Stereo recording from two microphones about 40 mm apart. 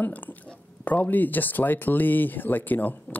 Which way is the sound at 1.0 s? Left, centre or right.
Left.